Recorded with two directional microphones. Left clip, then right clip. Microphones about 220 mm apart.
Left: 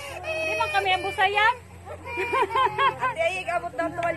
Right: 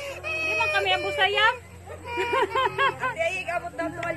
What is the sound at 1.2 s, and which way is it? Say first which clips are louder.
Speech: left 1 dB; centre (ahead or behind).